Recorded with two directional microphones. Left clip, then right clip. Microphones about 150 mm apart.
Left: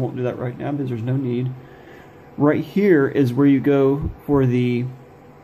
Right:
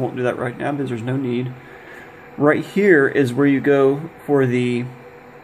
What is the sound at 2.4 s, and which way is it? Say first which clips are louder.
Speech: right 2 dB; 10° left (ahead or behind).